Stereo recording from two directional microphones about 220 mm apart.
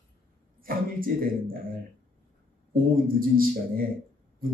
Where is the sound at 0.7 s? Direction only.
40° right (ahead or behind).